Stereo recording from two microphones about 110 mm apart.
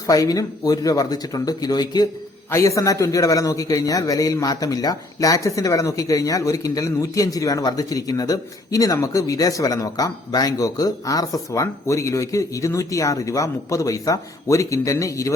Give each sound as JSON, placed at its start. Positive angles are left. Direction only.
{"t": 0.1, "sound": "speech", "side_deg": 35}
{"t": 2.5, "sound": "speech", "side_deg": 30}